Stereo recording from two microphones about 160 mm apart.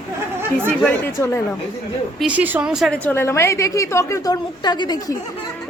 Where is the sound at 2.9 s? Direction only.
15° left (ahead or behind).